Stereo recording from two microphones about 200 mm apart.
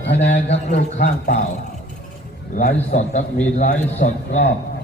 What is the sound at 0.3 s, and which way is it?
A man's voice, 35° left (ahead or behind).